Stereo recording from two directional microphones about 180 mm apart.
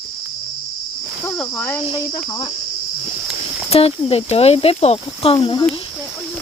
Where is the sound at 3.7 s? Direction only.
30° left (ahead or behind).